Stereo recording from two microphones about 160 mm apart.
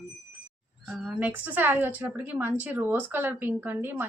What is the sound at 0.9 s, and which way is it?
A woman's voice, 5° right (ahead or behind).